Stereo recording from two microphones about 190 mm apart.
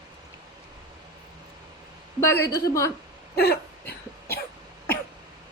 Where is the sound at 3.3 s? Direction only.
55° left (ahead or behind).